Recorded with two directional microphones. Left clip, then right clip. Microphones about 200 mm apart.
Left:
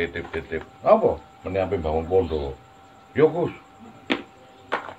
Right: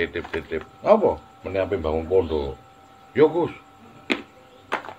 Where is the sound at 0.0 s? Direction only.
60° right (ahead or behind).